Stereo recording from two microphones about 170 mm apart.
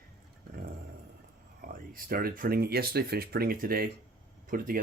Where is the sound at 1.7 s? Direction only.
60° right (ahead or behind).